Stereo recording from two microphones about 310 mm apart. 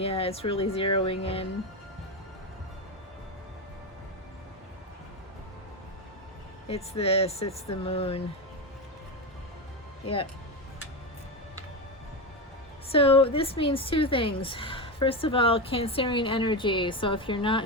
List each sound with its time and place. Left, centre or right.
0.0 s speech: centre
6.7 s speech: centre
12.9 s a woman's voice: centre